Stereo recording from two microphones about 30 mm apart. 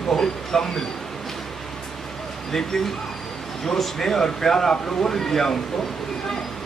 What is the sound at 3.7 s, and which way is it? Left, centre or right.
Speech, centre.